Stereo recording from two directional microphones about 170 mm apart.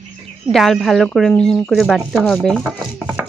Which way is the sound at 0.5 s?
Centre (ahead or behind).